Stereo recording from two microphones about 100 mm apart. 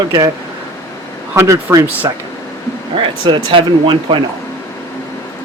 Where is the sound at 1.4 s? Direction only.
35° right (ahead or behind).